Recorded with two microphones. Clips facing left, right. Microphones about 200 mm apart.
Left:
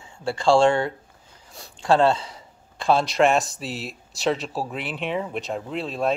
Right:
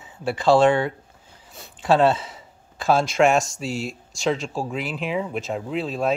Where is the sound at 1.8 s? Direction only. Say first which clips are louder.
Right 1 dB; 5° right (ahead or behind).